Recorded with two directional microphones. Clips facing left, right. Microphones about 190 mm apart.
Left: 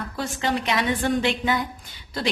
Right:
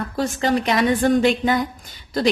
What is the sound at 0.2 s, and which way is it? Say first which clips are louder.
A woman's voice: right 6 dB; 40° right (ahead or behind).